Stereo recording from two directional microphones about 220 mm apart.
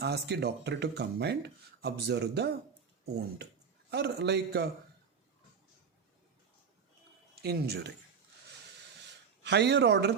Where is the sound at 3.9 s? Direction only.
50° right (ahead or behind).